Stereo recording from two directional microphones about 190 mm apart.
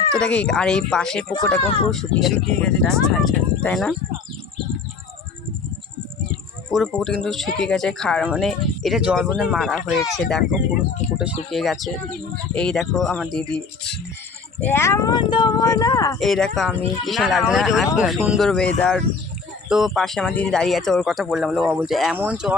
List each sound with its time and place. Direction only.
0.2 s speech: 5° left (ahead or behind)
1.6 s speech: 30° left (ahead or behind)
1.9 s speech: centre (ahead or behind)
6.3 s a sound: 5° left (ahead or behind)
7.3 s speech: centre (ahead or behind)
14.6 s speech: 10° left (ahead or behind)
16.1 s speech: centre (ahead or behind)